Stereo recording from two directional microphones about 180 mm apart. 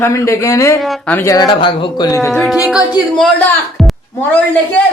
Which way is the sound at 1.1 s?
20° left (ahead or behind).